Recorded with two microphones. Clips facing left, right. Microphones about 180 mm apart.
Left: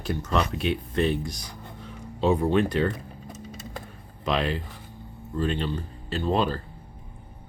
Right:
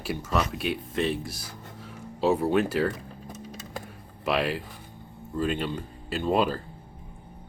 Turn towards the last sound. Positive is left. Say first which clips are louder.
# even
turn(degrees=-10)  # may be behind; listen again after turning